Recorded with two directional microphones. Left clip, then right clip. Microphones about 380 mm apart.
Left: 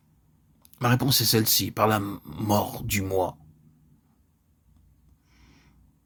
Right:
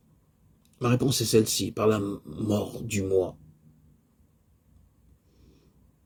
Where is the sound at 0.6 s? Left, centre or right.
Left.